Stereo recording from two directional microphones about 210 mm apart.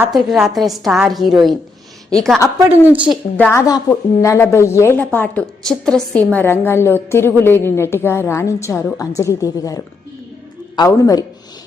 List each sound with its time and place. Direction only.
0.0 s a woman's voice: centre (ahead or behind)
3.3 s a woman's voice: 10° left (ahead or behind)